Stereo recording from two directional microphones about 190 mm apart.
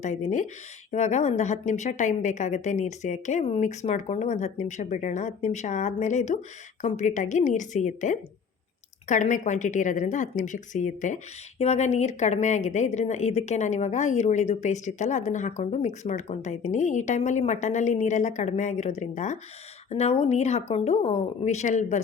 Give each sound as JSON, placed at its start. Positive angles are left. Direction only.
{"t": 0.0, "sound": "a woman's voice", "side_deg": 40}